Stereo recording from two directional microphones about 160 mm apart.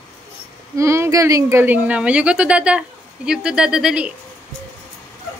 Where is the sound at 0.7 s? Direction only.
15° right (ahead or behind).